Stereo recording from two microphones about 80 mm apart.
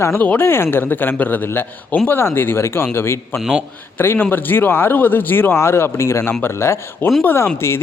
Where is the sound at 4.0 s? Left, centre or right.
Left.